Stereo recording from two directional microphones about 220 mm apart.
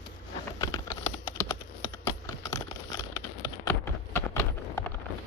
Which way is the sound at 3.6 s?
10° left (ahead or behind).